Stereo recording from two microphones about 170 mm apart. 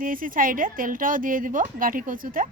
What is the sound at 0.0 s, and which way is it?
A child's voice, 55° right (ahead or behind).